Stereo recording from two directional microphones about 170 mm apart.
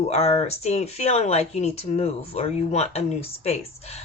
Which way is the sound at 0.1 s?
35° left (ahead or behind).